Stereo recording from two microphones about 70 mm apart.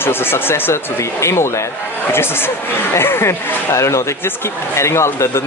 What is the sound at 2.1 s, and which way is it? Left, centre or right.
Speech, left.